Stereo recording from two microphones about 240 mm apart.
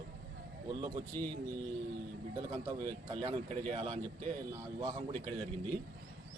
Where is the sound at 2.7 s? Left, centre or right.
Right.